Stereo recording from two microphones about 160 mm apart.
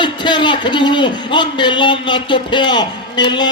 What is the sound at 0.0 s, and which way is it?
A man's voice, 30° left (ahead or behind).